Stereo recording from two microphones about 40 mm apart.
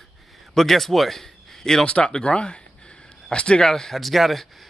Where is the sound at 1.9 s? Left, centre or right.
Left.